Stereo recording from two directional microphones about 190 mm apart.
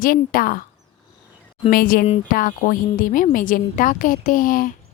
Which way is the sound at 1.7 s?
50° left (ahead or behind).